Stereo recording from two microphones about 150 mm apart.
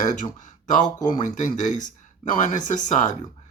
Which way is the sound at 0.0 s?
55° left (ahead or behind).